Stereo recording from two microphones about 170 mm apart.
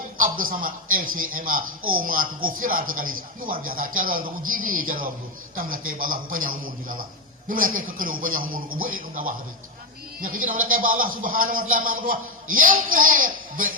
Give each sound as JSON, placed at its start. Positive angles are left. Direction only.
{"t": 0.2, "sound": "a man's voice", "side_deg": -55}